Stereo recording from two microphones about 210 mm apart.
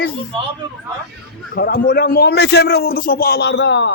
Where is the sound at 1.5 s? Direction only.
50° left (ahead or behind).